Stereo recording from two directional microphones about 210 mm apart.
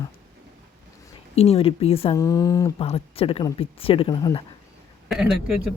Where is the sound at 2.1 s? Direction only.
15° left (ahead or behind).